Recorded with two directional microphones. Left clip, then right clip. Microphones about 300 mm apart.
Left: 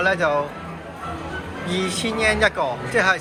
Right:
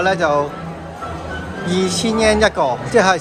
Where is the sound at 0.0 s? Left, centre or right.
Centre.